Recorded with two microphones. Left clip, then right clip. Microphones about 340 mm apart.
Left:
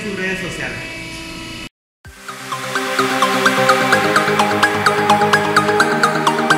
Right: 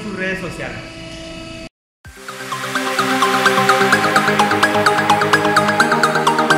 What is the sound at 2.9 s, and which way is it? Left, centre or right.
Music, centre.